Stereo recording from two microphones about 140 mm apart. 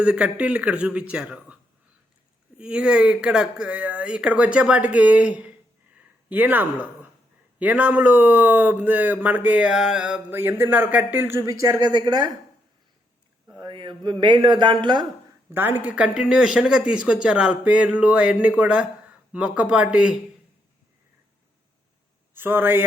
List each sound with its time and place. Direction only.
0.0 s speech: 10° right (ahead or behind)
2.6 s speech: 5° right (ahead or behind)
6.0 s a sound: 10° right (ahead or behind)
7.6 s speech: 10° right (ahead or behind); by 12.3 s 30° right (ahead or behind)
13.5 s speech: 30° right (ahead or behind)
15.4 s speech: 15° right (ahead or behind)
22.4 s speech: 15° right (ahead or behind)